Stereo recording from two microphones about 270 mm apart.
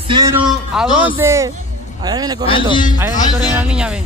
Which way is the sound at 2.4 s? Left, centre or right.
Centre.